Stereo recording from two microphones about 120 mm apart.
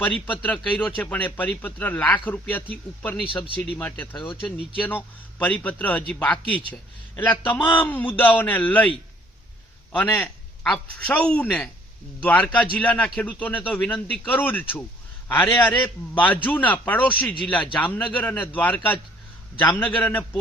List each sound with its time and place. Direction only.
0.0 s speech: 15° left (ahead or behind)
9.9 s speech: 10° left (ahead or behind)